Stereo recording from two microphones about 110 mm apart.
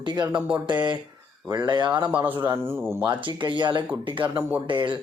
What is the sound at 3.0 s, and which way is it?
Speech, 45° right (ahead or behind).